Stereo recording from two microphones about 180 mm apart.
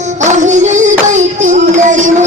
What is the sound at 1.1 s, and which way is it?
Child singing, 40° right (ahead or behind).